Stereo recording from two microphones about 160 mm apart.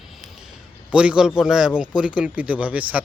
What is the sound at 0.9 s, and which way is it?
A man's voice, 5° right (ahead or behind).